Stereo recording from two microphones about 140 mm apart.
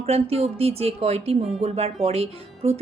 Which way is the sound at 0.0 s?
45° right (ahead or behind).